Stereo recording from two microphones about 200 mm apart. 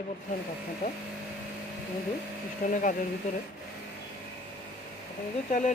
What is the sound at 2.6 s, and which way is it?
Speech, 45° left (ahead or behind).